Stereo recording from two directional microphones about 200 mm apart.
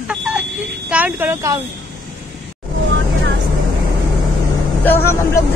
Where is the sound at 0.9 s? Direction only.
10° right (ahead or behind).